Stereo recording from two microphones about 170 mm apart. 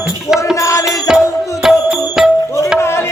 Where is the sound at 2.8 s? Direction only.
15° left (ahead or behind).